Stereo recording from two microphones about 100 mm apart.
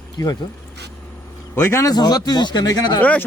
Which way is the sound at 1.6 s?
25° left (ahead or behind).